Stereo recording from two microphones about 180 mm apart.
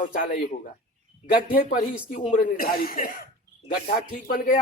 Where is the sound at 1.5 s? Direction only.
50° left (ahead or behind).